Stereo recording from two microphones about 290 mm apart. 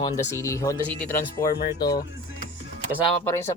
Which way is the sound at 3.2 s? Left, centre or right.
Centre.